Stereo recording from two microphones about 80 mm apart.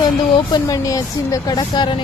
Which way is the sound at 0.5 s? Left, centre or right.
Left.